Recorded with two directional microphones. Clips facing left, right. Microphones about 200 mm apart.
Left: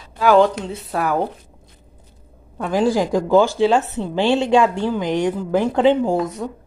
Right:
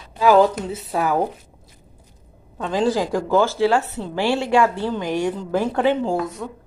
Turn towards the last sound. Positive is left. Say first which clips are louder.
# left 4 dB
turn(degrees=30)  # may be behind; listen again after turning